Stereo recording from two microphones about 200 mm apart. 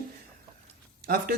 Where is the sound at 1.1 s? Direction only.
50° right (ahead or behind).